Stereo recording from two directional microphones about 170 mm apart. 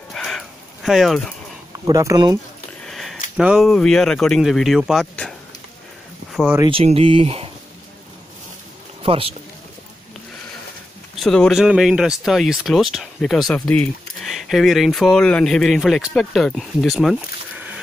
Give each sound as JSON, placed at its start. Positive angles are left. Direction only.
{"t": 0.1, "sound": "a sound", "side_deg": 5}
{"t": 1.7, "sound": "speech", "side_deg": -20}
{"t": 2.9, "sound": "a sound", "side_deg": 0}
{"t": 3.3, "sound": "speech", "side_deg": -5}
{"t": 6.3, "sound": "speech", "side_deg": -5}
{"t": 6.6, "sound": "speech", "side_deg": -35}
{"t": 9.0, "sound": "speech", "side_deg": -35}
{"t": 11.1, "sound": "speech", "side_deg": 5}